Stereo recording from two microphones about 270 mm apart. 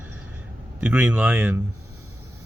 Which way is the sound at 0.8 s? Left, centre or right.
Centre.